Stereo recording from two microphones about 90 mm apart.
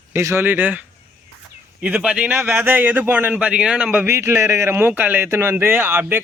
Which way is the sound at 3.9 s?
25° right (ahead or behind).